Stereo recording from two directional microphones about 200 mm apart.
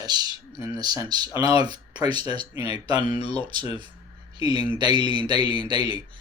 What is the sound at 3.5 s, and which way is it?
Speech, 20° right (ahead or behind).